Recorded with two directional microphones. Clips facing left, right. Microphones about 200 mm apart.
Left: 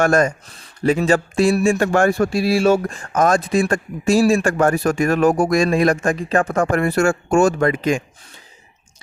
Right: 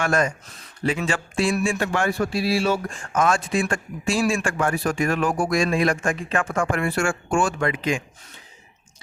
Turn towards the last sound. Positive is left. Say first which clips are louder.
# left 6 dB
turn(degrees=45)  # may be behind; listen again after turning